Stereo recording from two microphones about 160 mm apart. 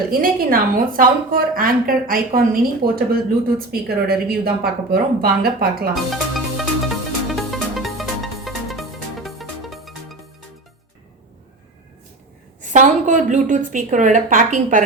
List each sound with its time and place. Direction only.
0.1 s a woman's voice: 65° right (ahead or behind)
5.9 s music: centre (ahead or behind)
12.7 s a woman's voice: 50° right (ahead or behind)